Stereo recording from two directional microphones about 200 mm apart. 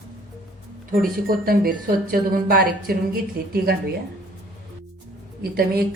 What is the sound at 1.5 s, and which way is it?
Speech, 45° right (ahead or behind).